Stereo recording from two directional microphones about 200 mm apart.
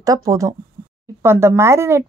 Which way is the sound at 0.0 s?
15° right (ahead or behind).